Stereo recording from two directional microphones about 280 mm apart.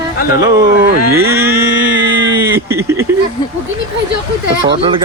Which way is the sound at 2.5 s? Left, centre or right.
Centre.